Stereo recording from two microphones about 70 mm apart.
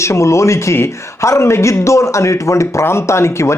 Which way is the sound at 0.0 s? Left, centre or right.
Left.